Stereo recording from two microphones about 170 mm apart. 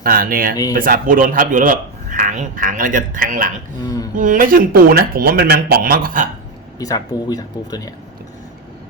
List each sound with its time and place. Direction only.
0.0 s speech: 55° right (ahead or behind)
3.8 s speech: 20° left (ahead or behind)
4.2 s speech: 50° right (ahead or behind)
6.7 s speech: 20° left (ahead or behind)